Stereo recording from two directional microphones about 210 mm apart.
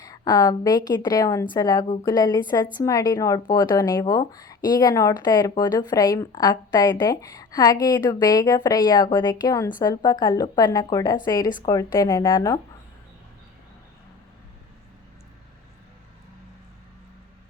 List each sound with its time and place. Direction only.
0.0 s a woman's voice: 15° left (ahead or behind)